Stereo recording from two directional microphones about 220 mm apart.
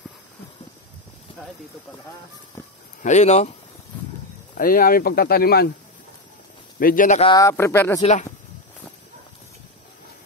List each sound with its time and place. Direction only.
2.6 s a sound: 15° left (ahead or behind)
3.0 s speech: 30° left (ahead or behind)
4.6 s speech: 40° left (ahead or behind)
6.8 s speech: 40° left (ahead or behind)
7.2 s speech: 15° left (ahead or behind)
8.0 s speech: 30° left (ahead or behind)